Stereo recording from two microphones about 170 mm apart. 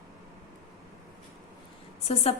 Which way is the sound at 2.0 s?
35° left (ahead or behind).